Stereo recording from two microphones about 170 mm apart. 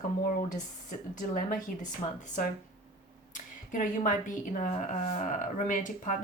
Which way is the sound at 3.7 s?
50° left (ahead or behind).